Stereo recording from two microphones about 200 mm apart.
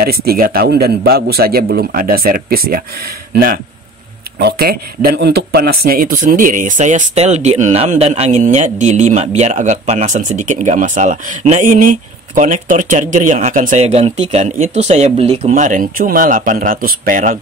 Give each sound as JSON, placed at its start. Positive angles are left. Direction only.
{"t": 0.0, "sound": "a man's voice", "side_deg": -50}
{"t": 4.4, "sound": "a man's voice", "side_deg": -50}